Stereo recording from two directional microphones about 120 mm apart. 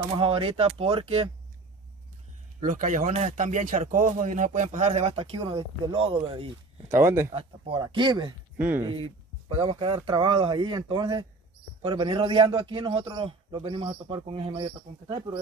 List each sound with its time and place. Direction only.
0.2 s a man's voice: 50° right (ahead or behind)
2.6 s speech: 90° right; by 6.9 s 50° right (ahead or behind)
6.9 s speech: 20° right (ahead or behind)
7.3 s speech: 45° right (ahead or behind)
8.5 s speech: 15° right (ahead or behind)
9.5 s a man's voice: 50° right (ahead or behind)